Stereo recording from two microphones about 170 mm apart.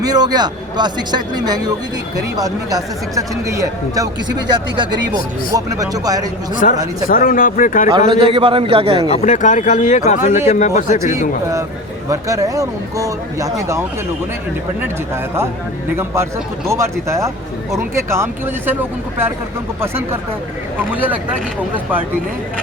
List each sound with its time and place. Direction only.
0.0 s speech: 25° right (ahead or behind)
6.6 s speech: 50° left (ahead or behind)
7.9 s a man's voice: 35° right (ahead or behind)
9.0 s speech: 40° left (ahead or behind)
12.0 s speech: 20° right (ahead or behind)
16.6 s speech: 15° right (ahead or behind)
20.9 s speech: 10° right (ahead or behind)